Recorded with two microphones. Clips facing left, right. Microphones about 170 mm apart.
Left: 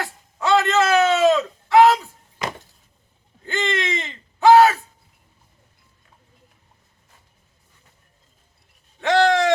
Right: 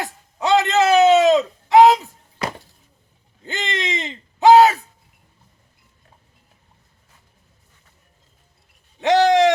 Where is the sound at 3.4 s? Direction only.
15° right (ahead or behind).